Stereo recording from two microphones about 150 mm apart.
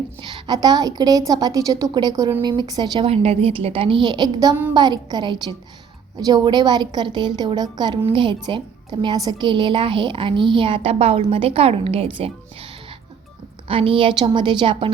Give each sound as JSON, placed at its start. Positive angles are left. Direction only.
{"t": 0.2, "sound": "a woman's voice", "side_deg": -30}
{"t": 3.1, "sound": "a woman's voice", "side_deg": -40}